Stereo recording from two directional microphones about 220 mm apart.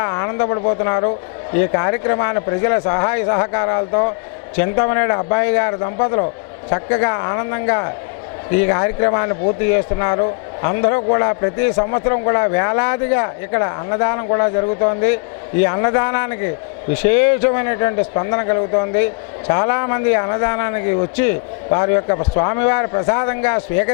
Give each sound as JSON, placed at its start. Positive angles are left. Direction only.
{"t": 0.0, "sound": "a man's voice", "side_deg": 20}